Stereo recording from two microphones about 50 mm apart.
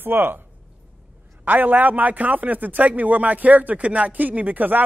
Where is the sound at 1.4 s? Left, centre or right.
Right.